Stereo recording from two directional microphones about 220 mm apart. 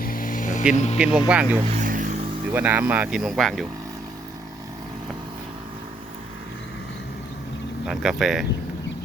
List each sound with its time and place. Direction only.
0.0 s vehicle: 40° left (ahead or behind)
0.7 s speech: 30° left (ahead or behind)
0.9 s speech: 5° right (ahead or behind)
1.6 s vehicle: 35° right (ahead or behind)
2.5 s speech: 10° right (ahead or behind)
7.9 s speech: centre (ahead or behind)